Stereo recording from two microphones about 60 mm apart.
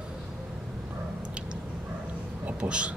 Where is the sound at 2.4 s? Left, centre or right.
Centre.